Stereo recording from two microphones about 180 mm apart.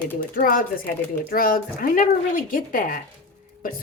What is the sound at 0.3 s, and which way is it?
A woman's voice, 50° left (ahead or behind).